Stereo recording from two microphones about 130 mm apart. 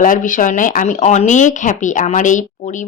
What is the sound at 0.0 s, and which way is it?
Speech, 85° left.